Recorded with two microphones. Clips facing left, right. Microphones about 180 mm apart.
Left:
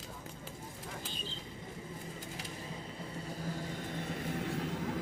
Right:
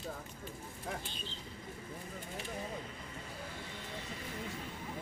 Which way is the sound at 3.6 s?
45° left (ahead or behind).